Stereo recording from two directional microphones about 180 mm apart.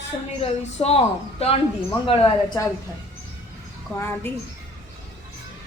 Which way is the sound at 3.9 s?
10° left (ahead or behind).